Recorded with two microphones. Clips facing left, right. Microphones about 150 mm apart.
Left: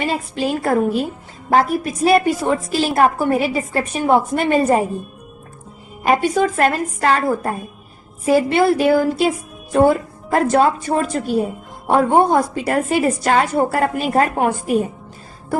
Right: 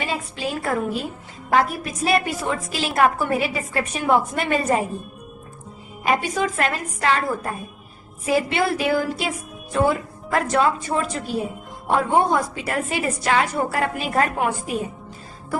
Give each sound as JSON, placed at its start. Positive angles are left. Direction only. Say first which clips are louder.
{"t": 0.0, "sound": "a woman's voice", "louder": "left 6 dB", "side_deg": 50}
{"t": 6.0, "sound": "a woman's voice", "louder": "left 6 dB", "side_deg": 40}